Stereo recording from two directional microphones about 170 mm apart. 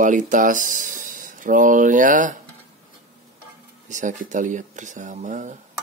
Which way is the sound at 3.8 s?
45° right (ahead or behind).